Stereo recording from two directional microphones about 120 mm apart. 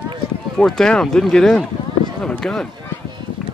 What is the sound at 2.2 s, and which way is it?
Run, 5° left (ahead or behind).